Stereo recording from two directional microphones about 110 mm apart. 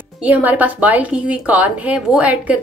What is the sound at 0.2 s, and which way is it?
A woman's voice, 15° right (ahead or behind).